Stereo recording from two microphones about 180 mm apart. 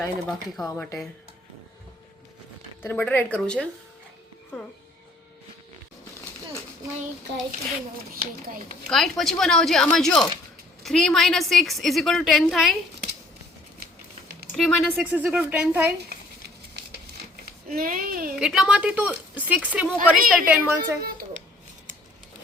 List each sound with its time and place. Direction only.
0.0 s a woman's voice: centre (ahead or behind)
0.6 s a woman's voice: 15° left (ahead or behind)
2.8 s a woman's voice: 10° left (ahead or behind)
8.1 s speech: 55° right (ahead or behind)
8.9 s a woman's voice: centre (ahead or behind)
14.5 s a woman's voice: centre (ahead or behind)
17.7 s a child's voice: 50° right (ahead or behind)
18.3 s a woman's voice: centre (ahead or behind)
21.0 s a sound: 55° right (ahead or behind)